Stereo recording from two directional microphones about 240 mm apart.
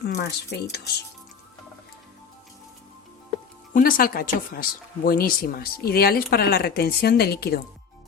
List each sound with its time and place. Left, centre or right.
0.0 s speech: left
3.8 s speech: left